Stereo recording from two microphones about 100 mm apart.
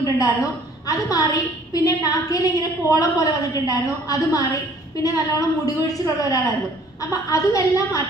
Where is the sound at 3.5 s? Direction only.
35° left (ahead or behind).